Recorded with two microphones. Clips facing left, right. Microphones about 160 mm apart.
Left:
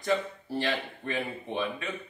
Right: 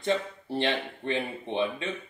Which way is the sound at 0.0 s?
25° right (ahead or behind).